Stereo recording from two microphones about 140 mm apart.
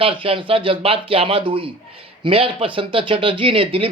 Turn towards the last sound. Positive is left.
turn(degrees=-40)  # may be behind; listen again after turning